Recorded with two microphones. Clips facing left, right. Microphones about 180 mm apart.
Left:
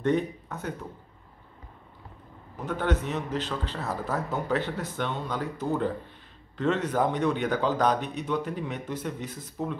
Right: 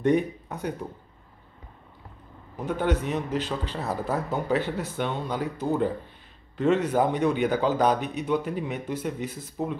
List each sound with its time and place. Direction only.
0.0 s speech: 15° right (ahead or behind)
2.6 s speech: 10° right (ahead or behind)